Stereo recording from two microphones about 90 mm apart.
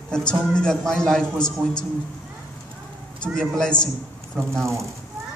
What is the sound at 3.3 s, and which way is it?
Speech, 10° left (ahead or behind).